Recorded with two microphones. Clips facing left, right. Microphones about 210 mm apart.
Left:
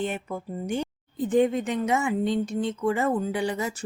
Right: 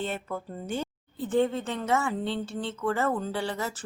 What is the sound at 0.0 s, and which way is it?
A woman's voice, 15° left (ahead or behind).